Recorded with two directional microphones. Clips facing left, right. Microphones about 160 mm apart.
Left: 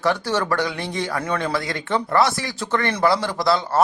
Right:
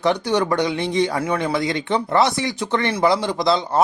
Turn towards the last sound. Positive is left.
turn(degrees=-20)  # may be behind; listen again after turning